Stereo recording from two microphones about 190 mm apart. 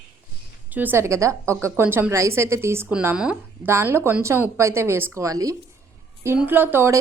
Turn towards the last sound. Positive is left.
turn(degrees=-10)  # may be behind; listen again after turning